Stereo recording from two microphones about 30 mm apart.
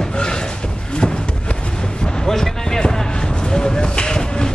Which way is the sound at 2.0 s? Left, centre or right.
Centre.